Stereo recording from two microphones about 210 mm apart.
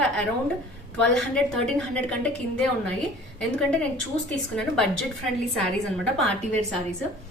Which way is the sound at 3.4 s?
5° left (ahead or behind).